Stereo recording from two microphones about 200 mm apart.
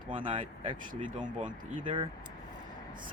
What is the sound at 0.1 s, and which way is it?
Speech, 25° right (ahead or behind).